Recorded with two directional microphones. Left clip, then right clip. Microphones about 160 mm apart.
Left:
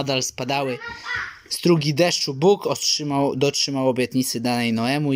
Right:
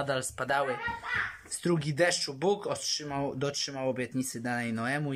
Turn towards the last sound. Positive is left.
turn(degrees=20)  # may be behind; listen again after turning